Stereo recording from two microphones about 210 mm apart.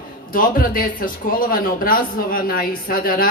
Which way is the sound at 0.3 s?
40° left (ahead or behind).